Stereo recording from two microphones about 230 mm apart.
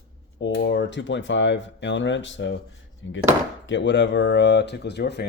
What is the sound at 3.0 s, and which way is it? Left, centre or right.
Chopping, left.